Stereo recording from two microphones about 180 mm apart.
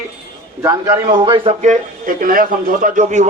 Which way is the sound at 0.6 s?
20° right (ahead or behind).